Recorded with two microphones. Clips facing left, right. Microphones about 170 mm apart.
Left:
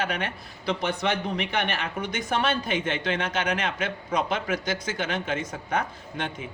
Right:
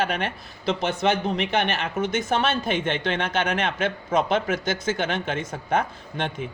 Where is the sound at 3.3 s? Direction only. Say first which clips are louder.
Right 3 dB; 55° right (ahead or behind).